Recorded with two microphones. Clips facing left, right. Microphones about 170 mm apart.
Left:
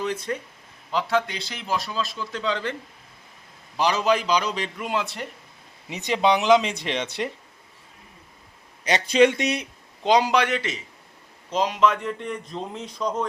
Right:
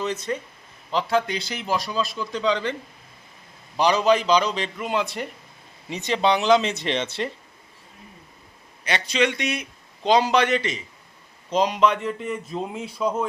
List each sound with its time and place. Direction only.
0.9 s a man's voice: centre (ahead or behind)
3.8 s a man's voice: 5° left (ahead or behind)
6.1 s speech: 15° left (ahead or behind)
8.9 s speech: 45° left (ahead or behind)
10.0 s a man's voice: 15° left (ahead or behind); by 13.2 s 10° right (ahead or behind)